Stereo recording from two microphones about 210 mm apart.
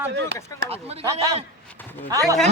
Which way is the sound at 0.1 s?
50° right (ahead or behind).